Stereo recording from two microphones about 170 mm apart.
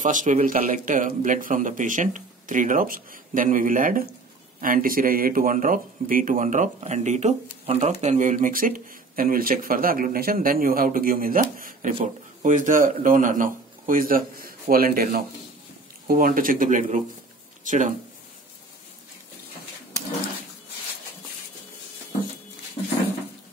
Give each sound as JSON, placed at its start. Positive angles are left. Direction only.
{"t": 0.0, "sound": "speech", "side_deg": -50}